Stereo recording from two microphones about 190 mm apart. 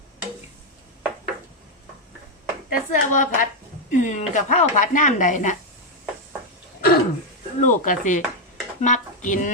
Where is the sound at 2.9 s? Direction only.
45° left (ahead or behind).